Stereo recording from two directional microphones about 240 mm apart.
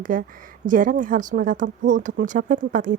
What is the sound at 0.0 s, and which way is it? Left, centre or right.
Speech, right.